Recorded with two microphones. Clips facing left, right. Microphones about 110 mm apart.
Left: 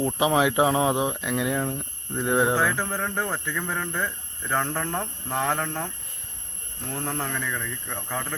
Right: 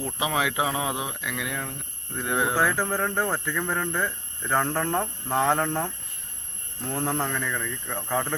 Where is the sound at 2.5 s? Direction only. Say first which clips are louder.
Right 1 dB; 5° right (ahead or behind).